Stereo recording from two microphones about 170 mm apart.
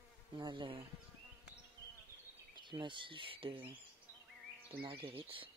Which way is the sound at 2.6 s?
30° right (ahead or behind).